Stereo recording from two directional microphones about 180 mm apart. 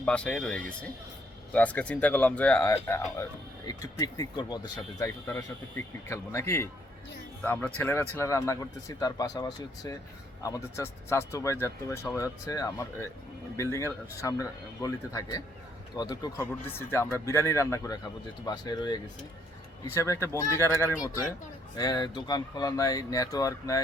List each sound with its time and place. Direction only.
0.0 s speech: 5° left (ahead or behind)